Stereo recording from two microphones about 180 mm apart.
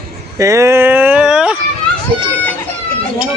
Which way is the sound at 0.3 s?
15° right (ahead or behind).